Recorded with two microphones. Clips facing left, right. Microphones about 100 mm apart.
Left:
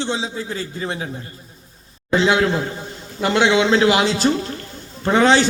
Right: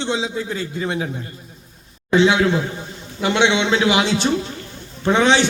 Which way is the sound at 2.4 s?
Centre (ahead or behind).